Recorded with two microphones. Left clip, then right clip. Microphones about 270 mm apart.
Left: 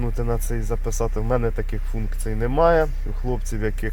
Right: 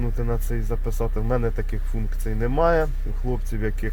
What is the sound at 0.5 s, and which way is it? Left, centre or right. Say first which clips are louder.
Speech: left 2 dB; centre.